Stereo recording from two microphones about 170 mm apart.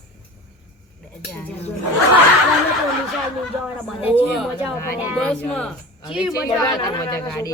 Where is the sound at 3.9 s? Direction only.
10° right (ahead or behind).